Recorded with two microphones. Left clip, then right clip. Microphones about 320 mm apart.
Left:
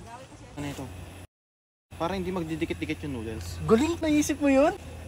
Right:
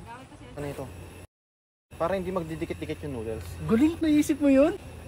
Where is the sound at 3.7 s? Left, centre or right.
Left.